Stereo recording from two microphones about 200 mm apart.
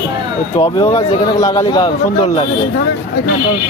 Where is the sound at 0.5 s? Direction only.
15° left (ahead or behind).